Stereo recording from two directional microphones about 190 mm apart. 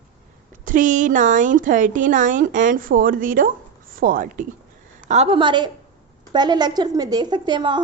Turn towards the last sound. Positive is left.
turn(degrees=-25)  # may be behind; listen again after turning